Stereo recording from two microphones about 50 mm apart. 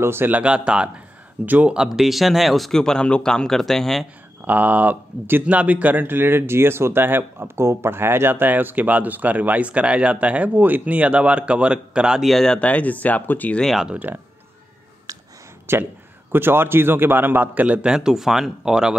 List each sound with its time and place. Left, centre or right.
0.0 s a man's voice: right
0.3 s speech: right
1.4 s speech: right
1.7 s speech: centre
4.5 s speech: right
5.5 s speech: right
10.5 s speech: right; by 12.2 s centre
12.2 s speech: centre
12.5 s speech: left
14.1 s speech: right
15.7 s a man's voice: right
17.6 s speech: centre